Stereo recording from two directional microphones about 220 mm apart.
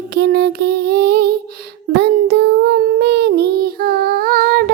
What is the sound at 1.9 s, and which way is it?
Child singing, 50° right (ahead or behind).